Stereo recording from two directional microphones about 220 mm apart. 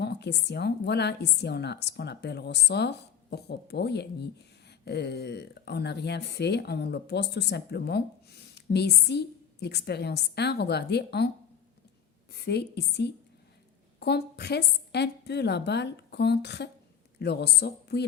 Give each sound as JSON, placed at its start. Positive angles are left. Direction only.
{"t": 0.0, "sound": "speech", "side_deg": 50}
{"t": 12.3, "sound": "speech", "side_deg": 50}